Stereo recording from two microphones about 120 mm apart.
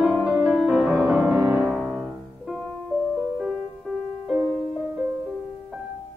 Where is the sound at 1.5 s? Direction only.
5° right (ahead or behind).